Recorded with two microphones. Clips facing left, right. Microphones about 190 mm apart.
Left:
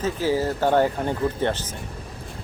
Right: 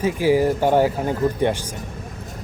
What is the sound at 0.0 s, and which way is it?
Speech, 15° right (ahead or behind).